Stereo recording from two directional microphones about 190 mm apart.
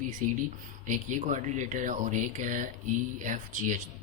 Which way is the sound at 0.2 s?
45° right (ahead or behind).